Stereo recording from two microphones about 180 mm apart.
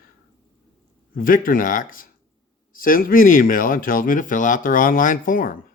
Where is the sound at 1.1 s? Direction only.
50° left (ahead or behind).